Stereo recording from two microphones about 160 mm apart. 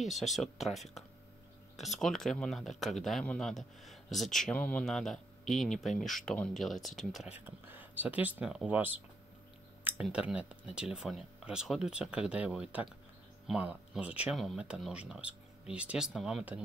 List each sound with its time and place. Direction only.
0.0 s speech: centre (ahead or behind)
7.3 s speech: 10° right (ahead or behind)
10.0 s speech: 5° right (ahead or behind)